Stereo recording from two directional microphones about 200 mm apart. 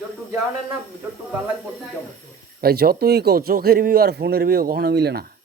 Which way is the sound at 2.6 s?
50° right (ahead or behind).